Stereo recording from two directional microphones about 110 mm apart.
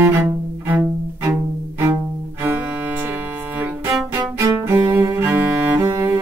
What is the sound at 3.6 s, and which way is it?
Music, 20° right (ahead or behind).